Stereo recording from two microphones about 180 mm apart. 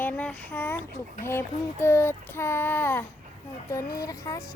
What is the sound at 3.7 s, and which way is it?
Speech, 20° left (ahead or behind).